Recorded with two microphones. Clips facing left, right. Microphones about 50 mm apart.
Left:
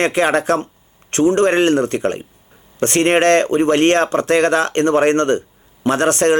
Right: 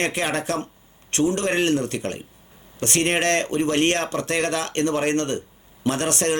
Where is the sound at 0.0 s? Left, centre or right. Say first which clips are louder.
Left 8 dB; left.